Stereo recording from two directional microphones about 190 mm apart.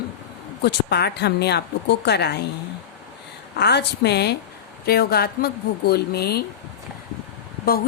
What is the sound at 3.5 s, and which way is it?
Speech, 60° left (ahead or behind).